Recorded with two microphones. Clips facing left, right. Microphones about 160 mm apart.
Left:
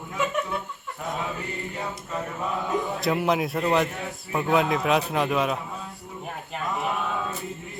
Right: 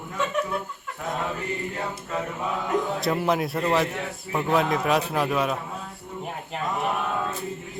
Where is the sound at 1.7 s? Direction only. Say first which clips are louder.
Right 2 dB; centre (ahead or behind).